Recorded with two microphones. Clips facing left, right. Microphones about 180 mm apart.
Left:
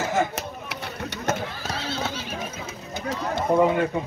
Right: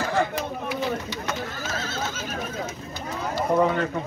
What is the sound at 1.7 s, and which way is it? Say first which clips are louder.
Neigh: left 3 dB; 45° right (ahead or behind).